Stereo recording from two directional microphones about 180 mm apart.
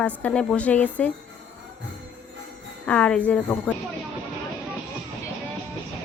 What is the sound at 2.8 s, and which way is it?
Speech, 5° left (ahead or behind).